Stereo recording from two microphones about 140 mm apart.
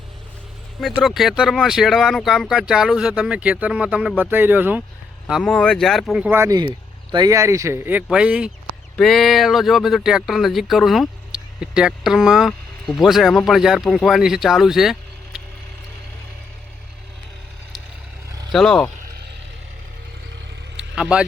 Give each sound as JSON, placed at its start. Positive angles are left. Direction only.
{"t": 1.0, "sound": "speech", "side_deg": 0}
{"t": 5.4, "sound": "speech", "side_deg": 5}
{"t": 6.3, "sound": "speech", "side_deg": -20}
{"t": 18.3, "sound": "vehicle", "side_deg": -25}
{"t": 18.5, "sound": "speech", "side_deg": 5}
{"t": 20.7, "sound": "vehicle", "side_deg": -5}